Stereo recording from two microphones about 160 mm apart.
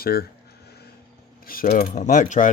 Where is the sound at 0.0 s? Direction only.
70° left (ahead or behind).